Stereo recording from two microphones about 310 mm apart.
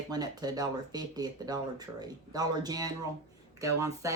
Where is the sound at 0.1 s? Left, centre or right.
Centre.